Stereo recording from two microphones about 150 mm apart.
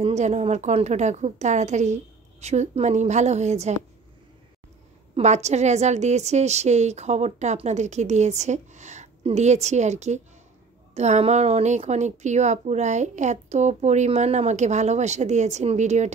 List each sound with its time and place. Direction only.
0.0 s a woman's voice: 50° right (ahead or behind)
5.1 s a woman's voice: 50° right (ahead or behind)